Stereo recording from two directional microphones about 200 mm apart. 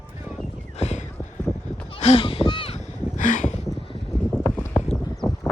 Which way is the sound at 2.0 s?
30° left (ahead or behind).